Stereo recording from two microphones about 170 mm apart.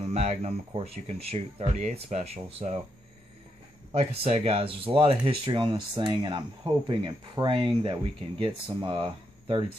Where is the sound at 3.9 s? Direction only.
35° right (ahead or behind).